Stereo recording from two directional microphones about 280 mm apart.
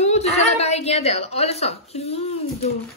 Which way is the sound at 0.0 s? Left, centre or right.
Left.